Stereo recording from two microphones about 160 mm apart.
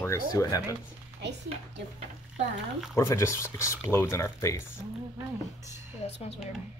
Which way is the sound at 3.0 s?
15° left (ahead or behind).